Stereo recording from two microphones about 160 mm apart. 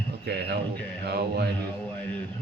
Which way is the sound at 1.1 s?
90° right.